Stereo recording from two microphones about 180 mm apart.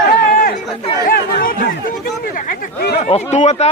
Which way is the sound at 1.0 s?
55° left (ahead or behind).